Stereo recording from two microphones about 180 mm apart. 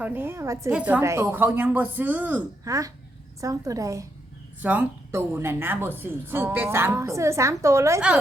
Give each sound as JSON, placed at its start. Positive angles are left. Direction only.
{"t": 0.0, "sound": "a woman's voice", "side_deg": -10}